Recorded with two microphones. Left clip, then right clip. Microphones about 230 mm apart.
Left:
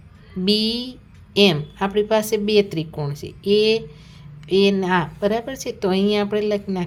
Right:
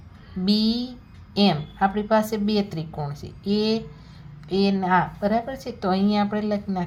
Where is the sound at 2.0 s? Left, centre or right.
Left.